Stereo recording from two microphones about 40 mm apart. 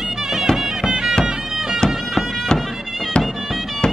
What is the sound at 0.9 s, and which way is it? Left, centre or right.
Bagpipes, centre.